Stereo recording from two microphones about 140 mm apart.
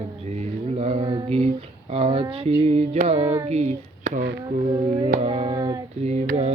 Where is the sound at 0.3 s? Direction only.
50° right (ahead or behind).